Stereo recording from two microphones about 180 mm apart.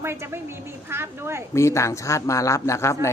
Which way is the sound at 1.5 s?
15° left (ahead or behind).